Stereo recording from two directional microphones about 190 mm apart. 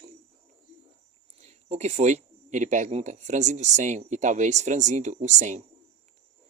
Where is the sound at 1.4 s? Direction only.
35° right (ahead or behind).